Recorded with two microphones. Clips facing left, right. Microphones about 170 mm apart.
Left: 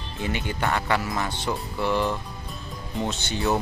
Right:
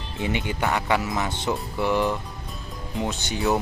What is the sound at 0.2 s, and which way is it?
Speech, 20° right (ahead or behind).